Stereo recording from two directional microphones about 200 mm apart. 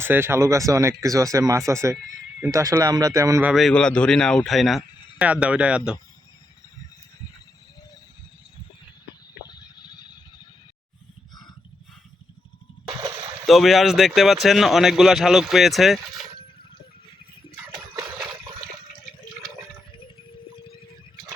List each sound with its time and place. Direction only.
0.0 s speech: 10° right (ahead or behind)
3.5 s speech: centre (ahead or behind)
9.5 s a sound: 20° left (ahead or behind)
13.5 s speech: centre (ahead or behind)